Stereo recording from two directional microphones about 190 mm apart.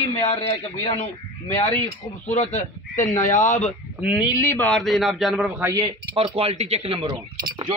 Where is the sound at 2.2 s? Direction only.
35° left (ahead or behind).